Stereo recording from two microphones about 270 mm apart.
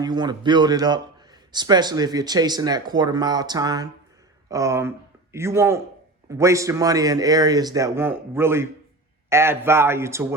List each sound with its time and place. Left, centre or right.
0.0 s a man's voice: centre